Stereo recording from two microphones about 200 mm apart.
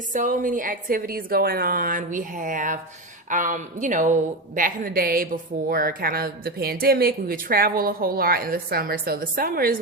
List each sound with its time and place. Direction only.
0.1 s a woman's voice: 40° right (ahead or behind)